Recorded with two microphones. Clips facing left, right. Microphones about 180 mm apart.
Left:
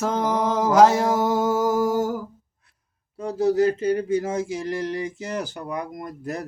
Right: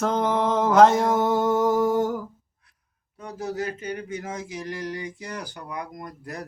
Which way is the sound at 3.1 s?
30° left (ahead or behind).